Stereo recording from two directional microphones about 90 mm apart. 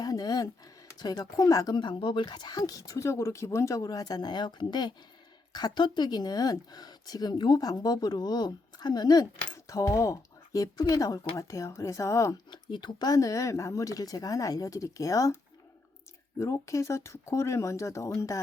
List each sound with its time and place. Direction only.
0.0 s a sound: 45° left (ahead or behind)
0.9 s speech: 50° left (ahead or behind)
1.7 s speech: 60° left (ahead or behind)
9.6 s speech: 40° left (ahead or behind)
12.7 s speech: 55° left (ahead or behind)
16.4 s speech: 35° left (ahead or behind)